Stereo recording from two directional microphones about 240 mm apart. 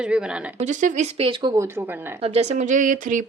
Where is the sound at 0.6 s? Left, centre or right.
Right.